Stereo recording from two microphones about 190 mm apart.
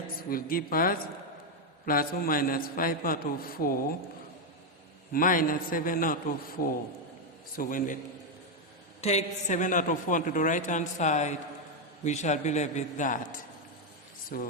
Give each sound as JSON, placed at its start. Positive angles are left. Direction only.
{"t": 0.2, "sound": "a man's voice", "side_deg": 50}
{"t": 5.1, "sound": "a man's voice", "side_deg": 45}
{"t": 9.0, "sound": "a man's voice", "side_deg": 35}
{"t": 14.3, "sound": "a man's voice", "side_deg": 50}